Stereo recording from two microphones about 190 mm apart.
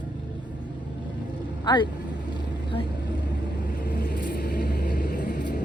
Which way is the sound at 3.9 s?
50° left (ahead or behind).